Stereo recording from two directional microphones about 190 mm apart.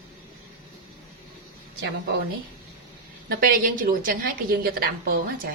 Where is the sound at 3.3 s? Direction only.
50° right (ahead or behind).